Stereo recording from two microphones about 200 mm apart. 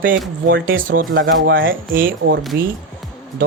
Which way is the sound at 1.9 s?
45° right (ahead or behind).